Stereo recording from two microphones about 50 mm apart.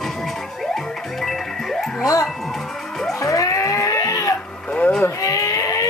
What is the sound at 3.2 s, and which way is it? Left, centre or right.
Livestock, left.